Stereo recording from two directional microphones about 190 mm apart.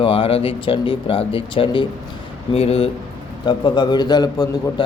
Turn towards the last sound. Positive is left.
turn(degrees=20)  # may be behind; listen again after turning